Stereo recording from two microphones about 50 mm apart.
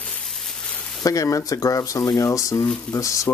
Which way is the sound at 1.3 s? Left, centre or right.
Left.